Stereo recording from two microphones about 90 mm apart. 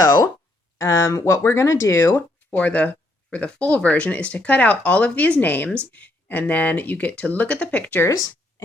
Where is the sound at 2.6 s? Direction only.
15° left (ahead or behind).